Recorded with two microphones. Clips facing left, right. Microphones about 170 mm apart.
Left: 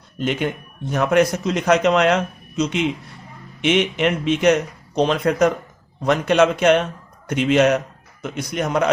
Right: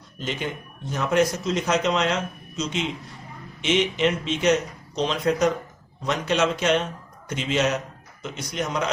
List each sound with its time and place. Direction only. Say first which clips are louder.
0.2 s speech: left 7 dB; 60° left (ahead or behind)